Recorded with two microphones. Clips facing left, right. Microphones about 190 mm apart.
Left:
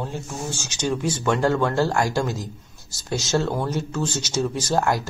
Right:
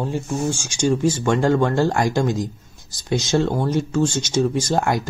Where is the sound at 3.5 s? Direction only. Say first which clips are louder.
Right 3 dB; 15° right (ahead or behind).